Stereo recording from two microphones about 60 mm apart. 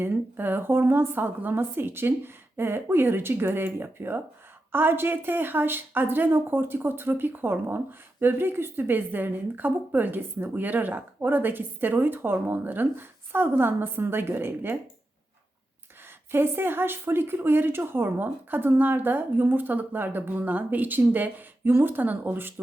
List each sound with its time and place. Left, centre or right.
0.0 s speech: right
16.3 s speech: right